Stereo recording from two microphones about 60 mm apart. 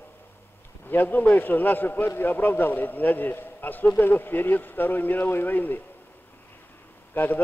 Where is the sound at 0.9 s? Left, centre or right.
Left.